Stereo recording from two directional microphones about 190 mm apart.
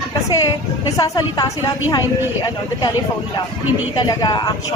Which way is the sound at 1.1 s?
20° left (ahead or behind).